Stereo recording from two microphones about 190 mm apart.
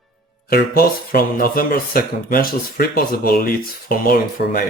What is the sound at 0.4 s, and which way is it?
Speech, 50° left (ahead or behind).